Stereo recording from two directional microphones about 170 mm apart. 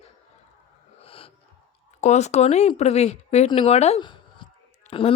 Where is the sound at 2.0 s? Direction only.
45° left (ahead or behind).